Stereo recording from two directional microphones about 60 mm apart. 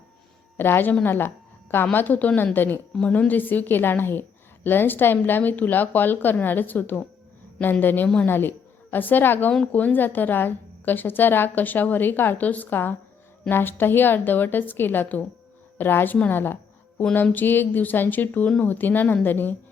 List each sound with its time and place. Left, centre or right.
0.5 s a woman's voice: left
8.0 s a woman's voice: left
8.3 s a woman's voice: left